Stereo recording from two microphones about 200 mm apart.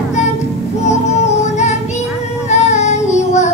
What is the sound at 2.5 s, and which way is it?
Child singing, 35° left (ahead or behind).